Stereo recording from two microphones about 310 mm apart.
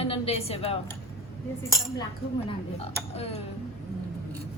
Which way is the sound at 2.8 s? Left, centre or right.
Centre.